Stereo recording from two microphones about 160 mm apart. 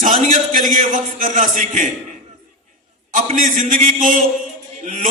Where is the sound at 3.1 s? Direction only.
55° right (ahead or behind).